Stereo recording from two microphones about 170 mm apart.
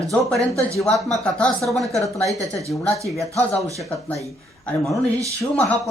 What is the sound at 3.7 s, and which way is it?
Speech, centre (ahead or behind).